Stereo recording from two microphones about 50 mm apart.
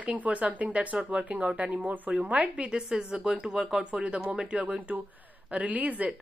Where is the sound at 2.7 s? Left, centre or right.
Centre.